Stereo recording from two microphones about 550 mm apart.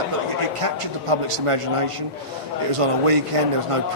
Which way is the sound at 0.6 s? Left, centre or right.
Right.